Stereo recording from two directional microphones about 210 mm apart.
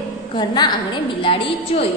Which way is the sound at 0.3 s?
20° left (ahead or behind).